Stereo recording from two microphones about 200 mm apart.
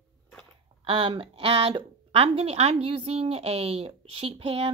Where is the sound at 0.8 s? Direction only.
25° right (ahead or behind).